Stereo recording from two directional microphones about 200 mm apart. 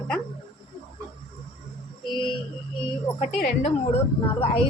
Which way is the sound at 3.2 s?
35° left (ahead or behind).